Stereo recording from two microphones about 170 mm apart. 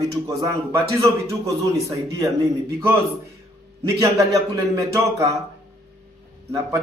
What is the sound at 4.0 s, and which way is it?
A man's voice, 20° right (ahead or behind).